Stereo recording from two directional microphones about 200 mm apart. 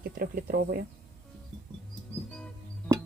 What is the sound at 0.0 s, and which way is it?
Speech, 50° right (ahead or behind).